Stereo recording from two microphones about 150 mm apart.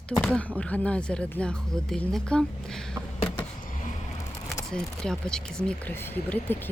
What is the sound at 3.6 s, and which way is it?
Vehicle, 60° left (ahead or behind).